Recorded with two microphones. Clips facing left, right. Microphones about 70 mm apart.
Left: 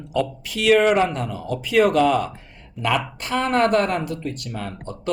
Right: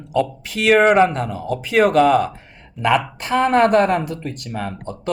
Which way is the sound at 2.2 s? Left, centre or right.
Right.